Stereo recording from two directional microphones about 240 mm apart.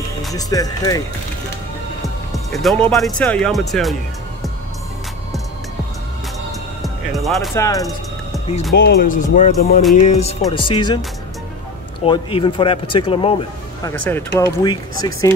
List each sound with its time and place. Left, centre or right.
0.3 s speech: centre
2.3 s speech: centre
6.8 s speech: centre
7.5 s speech: centre
8.7 s speech: left; by 11.0 s centre
12.0 s speech: left
14.0 s speech: centre